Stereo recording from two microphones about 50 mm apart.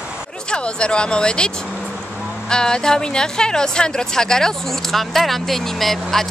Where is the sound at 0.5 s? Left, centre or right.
Centre.